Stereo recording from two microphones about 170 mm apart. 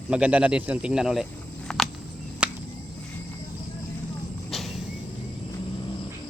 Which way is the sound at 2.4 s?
5° right (ahead or behind).